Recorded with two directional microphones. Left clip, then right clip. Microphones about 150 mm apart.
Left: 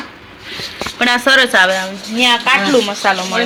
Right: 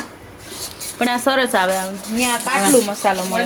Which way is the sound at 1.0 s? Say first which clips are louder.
Left 6 dB; 20° right (ahead or behind).